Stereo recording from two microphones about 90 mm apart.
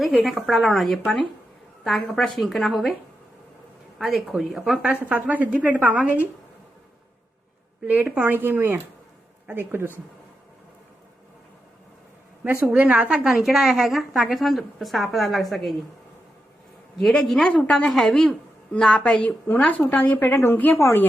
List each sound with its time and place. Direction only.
0.0 s a woman's voice: centre (ahead or behind)
3.9 s a woman's voice: centre (ahead or behind)
5.0 s a woman's voice: 15° right (ahead or behind)
7.8 s speech: 15° right (ahead or behind)
12.7 s a woman's voice: 15° right (ahead or behind); by 15.7 s centre (ahead or behind)
17.0 s a woman's voice: centre (ahead or behind); by 21.1 s 25° left (ahead or behind)